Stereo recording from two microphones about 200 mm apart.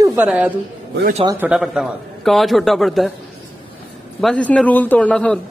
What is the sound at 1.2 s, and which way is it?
Speech, 15° right (ahead or behind).